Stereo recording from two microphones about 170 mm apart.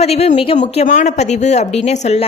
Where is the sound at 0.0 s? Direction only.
40° left (ahead or behind).